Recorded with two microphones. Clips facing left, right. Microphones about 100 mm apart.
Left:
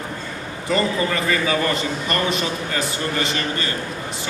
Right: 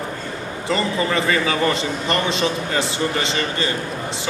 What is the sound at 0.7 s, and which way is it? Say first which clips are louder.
A man's voice: even; 25° right (ahead or behind).